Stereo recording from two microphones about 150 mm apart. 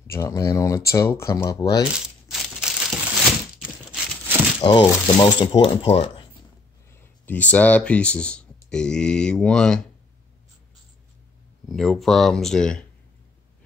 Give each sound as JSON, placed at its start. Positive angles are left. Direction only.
{"t": 0.0, "sound": "speech", "side_deg": 20}
{"t": 1.9, "sound": "crumpling", "side_deg": -5}
{"t": 3.6, "sound": "a sound", "side_deg": -5}
{"t": 4.6, "sound": "speech", "side_deg": 35}
{"t": 6.9, "sound": "speech", "side_deg": 15}
{"t": 11.7, "sound": "speech", "side_deg": 0}